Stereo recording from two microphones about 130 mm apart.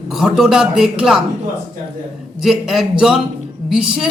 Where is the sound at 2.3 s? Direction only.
5° right (ahead or behind).